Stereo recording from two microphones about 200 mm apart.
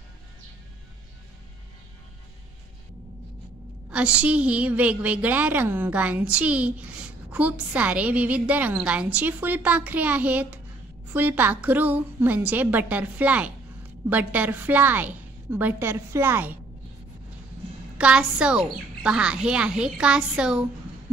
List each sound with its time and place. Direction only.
3.9 s a woman's voice: 5° right (ahead or behind)
17.9 s speech: 5° right (ahead or behind)